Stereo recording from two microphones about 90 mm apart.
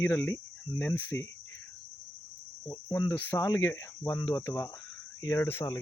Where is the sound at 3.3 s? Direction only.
40° left (ahead or behind).